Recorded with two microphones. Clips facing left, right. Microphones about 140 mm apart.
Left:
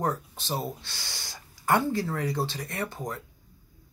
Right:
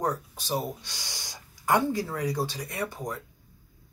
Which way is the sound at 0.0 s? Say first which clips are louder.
Even; 15° right (ahead or behind).